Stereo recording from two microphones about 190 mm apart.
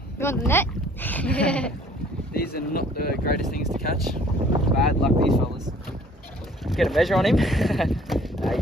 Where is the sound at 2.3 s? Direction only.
55° left (ahead or behind).